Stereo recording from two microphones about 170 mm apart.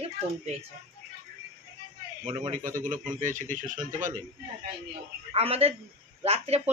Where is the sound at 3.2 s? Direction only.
50° right (ahead or behind).